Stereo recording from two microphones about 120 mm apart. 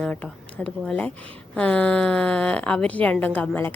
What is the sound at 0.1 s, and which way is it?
Speech, 15° left (ahead or behind).